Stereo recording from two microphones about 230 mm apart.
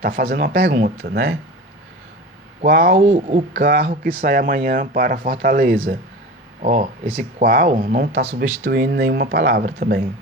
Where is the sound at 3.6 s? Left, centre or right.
Right.